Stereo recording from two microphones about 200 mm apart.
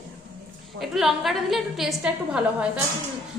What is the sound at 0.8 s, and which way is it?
A woman's voice, centre (ahead or behind).